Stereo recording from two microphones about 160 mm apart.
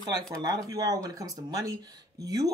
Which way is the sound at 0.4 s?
25° right (ahead or behind).